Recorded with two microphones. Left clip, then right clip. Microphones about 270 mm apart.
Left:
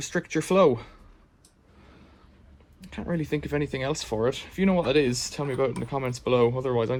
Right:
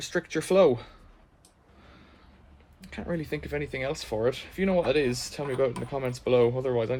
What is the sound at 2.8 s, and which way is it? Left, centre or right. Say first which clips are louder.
Speech: left 2 dB; centre.